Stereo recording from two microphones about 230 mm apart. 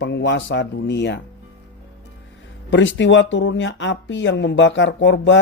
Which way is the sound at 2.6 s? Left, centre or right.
Left.